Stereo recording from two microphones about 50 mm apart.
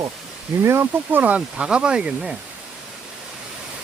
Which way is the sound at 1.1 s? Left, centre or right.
Right.